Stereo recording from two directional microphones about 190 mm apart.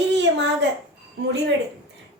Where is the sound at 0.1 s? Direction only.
65° right (ahead or behind).